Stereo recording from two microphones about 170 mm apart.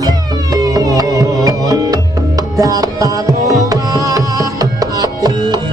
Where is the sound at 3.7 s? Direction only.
20° right (ahead or behind).